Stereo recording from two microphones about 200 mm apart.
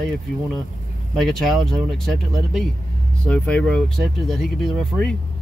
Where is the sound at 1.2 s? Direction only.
Centre (ahead or behind).